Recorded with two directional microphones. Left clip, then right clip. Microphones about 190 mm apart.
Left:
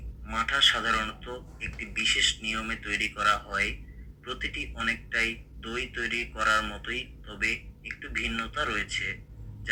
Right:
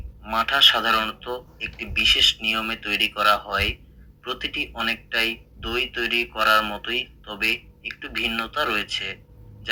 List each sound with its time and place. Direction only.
0.3 s a man's voice: 20° right (ahead or behind)